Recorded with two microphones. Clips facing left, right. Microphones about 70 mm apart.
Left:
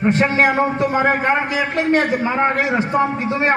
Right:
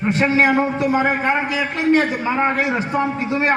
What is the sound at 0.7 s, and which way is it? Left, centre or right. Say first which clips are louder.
Speech: left 1 dB; left.